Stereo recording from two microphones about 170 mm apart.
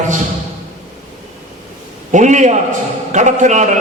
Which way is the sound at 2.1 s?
45° right (ahead or behind).